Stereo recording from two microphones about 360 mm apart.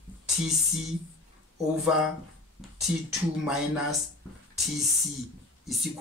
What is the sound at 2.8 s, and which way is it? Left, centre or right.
Speech, centre.